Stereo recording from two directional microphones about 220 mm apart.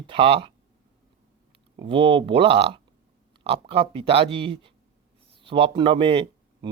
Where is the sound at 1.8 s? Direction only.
25° right (ahead or behind).